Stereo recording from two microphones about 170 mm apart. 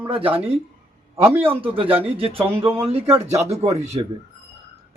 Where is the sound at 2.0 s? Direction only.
35° right (ahead or behind).